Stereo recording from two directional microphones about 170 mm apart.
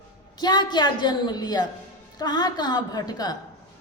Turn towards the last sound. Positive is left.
turn(degrees=25)  # may be behind; listen again after turning